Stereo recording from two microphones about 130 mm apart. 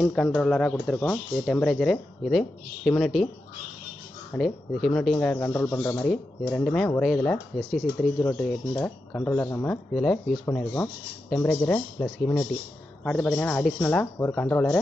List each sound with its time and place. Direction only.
0.0 s speech: centre (ahead or behind)
0.9 s speech: 15° left (ahead or behind)
1.4 s speech: centre (ahead or behind)
4.3 s speech: centre (ahead or behind); by 6.0 s 20° left (ahead or behind)
6.0 s speech: 10° left (ahead or behind)
8.8 s speech: 15° left (ahead or behind)
9.9 s speech: centre (ahead or behind)